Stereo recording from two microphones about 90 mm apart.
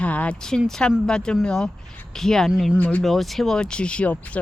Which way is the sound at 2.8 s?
15° left (ahead or behind).